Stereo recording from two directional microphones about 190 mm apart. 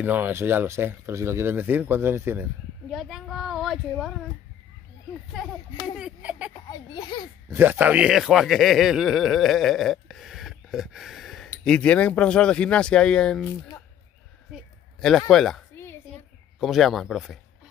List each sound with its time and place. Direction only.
0.0 s speech: 10° right (ahead or behind)
2.9 s speech: centre (ahead or behind)
5.9 s speech: 5° right (ahead or behind)
6.7 s a child's voice: 20° left (ahead or behind)
7.4 s a man's voice: 10° right (ahead or behind); by 13.4 s 5° left (ahead or behind)
14.5 s speech: 5° left (ahead or behind)
15.7 s a sound: 10° left (ahead or behind)
16.5 s speech: centre (ahead or behind)